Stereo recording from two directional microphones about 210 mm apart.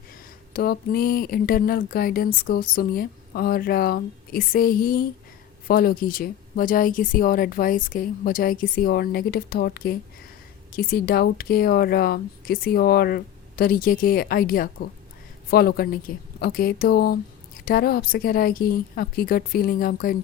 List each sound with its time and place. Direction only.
0.5 s speech: 45° left (ahead or behind)